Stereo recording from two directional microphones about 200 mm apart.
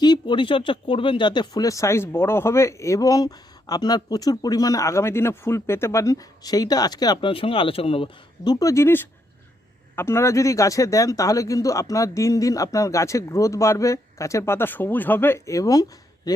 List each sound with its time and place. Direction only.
0.0 s speech: 20° left (ahead or behind)